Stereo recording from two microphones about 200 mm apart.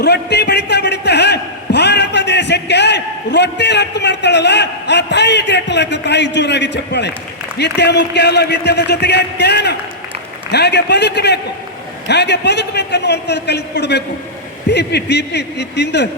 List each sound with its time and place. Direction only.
0.0 s a man's voice: 55° left (ahead or behind)